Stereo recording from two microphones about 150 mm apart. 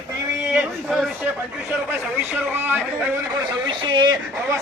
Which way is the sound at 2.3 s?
15° right (ahead or behind).